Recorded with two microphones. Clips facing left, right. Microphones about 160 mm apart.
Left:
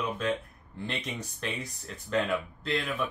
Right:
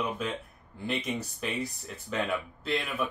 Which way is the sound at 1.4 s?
5° right (ahead or behind).